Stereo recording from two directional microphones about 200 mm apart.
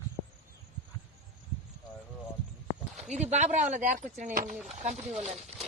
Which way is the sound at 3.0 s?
35° right (ahead or behind).